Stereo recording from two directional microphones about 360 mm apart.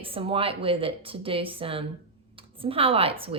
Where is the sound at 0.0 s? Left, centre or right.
Centre.